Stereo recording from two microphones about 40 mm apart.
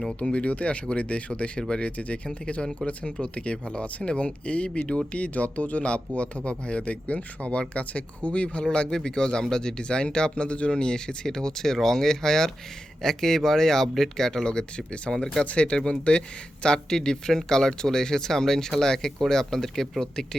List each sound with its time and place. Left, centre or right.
0.3 s speech: left; by 15.4 s centre
15.4 s speech: left; by 19.9 s centre